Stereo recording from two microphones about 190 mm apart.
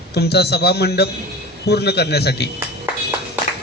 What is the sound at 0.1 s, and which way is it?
Speech, 60° left (ahead or behind).